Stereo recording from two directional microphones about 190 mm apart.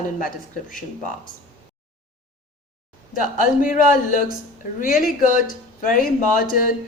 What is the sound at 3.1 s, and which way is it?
A woman's voice, 45° left (ahead or behind).